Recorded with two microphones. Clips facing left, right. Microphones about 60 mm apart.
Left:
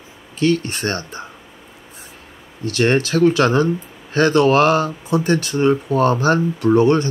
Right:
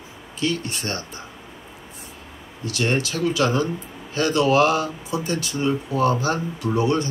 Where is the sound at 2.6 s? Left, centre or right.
Left.